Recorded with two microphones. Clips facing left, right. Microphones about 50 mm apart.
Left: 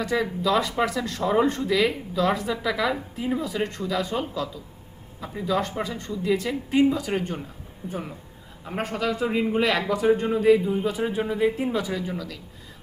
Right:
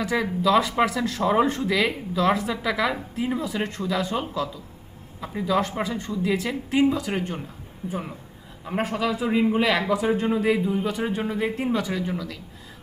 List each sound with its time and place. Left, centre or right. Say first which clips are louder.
0.0 s a woman's voice: right 1 dB; centre
1.2 s a man's voice: right 1 dB; centre
1.5 s a woman's voice: left 1 dB; centre
5.3 s a woman's voice: right 2 dB; centre
8.6 s a man's voice: right 2 dB; centre